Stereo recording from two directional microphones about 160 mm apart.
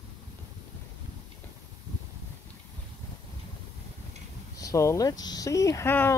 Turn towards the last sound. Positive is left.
turn(degrees=15)  # may be behind; listen again after turning